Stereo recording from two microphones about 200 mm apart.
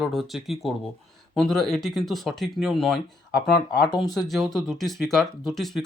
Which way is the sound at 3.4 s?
50° left (ahead or behind).